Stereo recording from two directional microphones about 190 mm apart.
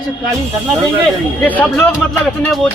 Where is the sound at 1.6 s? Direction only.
Centre (ahead or behind).